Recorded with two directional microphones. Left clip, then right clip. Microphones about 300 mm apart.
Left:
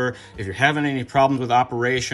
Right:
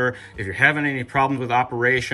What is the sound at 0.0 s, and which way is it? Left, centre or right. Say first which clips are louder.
Speech: right 2 dB; centre.